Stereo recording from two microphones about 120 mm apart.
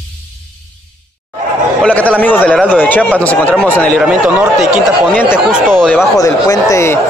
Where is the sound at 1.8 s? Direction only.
10° left (ahead or behind).